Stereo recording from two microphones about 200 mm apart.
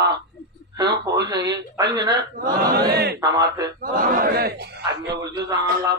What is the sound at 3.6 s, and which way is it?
A man's voice, 45° right (ahead or behind).